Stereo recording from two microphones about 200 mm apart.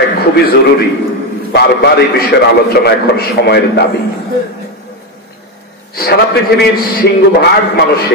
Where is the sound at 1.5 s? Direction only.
55° left (ahead or behind).